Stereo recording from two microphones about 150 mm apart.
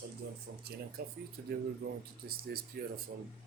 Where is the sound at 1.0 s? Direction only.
80° right.